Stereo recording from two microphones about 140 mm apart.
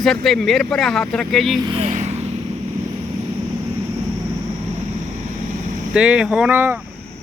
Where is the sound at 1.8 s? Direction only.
50° right (ahead or behind).